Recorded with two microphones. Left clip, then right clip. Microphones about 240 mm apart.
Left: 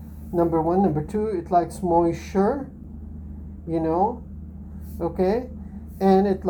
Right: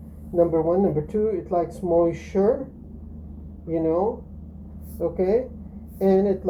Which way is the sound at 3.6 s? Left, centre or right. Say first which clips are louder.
Right 1 dB; left.